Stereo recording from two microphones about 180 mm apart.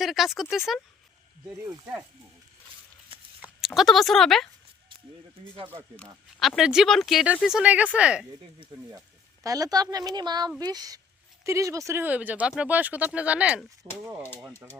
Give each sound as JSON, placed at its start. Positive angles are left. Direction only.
{"t": 0.0, "sound": "speech", "side_deg": 0}
{"t": 1.5, "sound": "speech", "side_deg": -15}
{"t": 3.1, "sound": "a sound", "side_deg": -30}
{"t": 3.7, "sound": "speech", "side_deg": 0}
{"t": 6.4, "sound": "speech", "side_deg": 0}
{"t": 8.6, "sound": "speech", "side_deg": -25}